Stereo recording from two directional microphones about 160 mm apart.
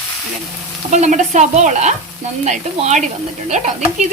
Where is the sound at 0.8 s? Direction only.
50° right (ahead or behind).